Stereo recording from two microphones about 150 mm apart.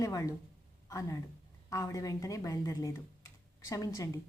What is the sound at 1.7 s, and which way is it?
Speech, 20° left (ahead or behind).